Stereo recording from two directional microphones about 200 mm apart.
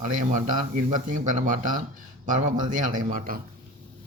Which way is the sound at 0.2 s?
40° right (ahead or behind).